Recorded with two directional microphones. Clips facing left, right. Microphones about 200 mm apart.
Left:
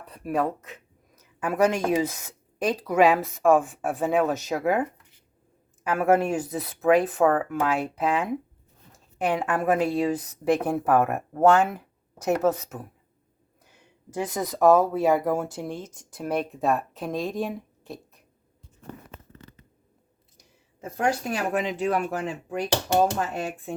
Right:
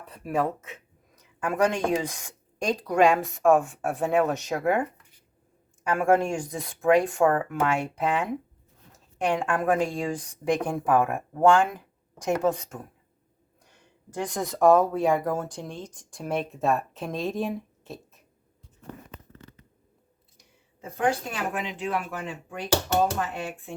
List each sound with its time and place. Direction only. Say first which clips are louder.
0.0 s a woman's voice: left 1 dB; centre (ahead or behind)
20.8 s speech: even; 35° left (ahead or behind)